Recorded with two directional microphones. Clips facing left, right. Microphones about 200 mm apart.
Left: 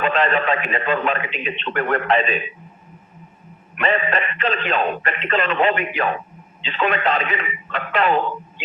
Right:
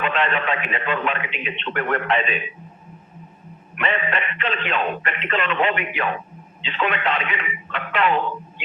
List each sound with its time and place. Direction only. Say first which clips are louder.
0.0 s speech: left 3 dB; 40° left (ahead or behind)
3.8 s a man's voice: left 4 dB; 40° left (ahead or behind)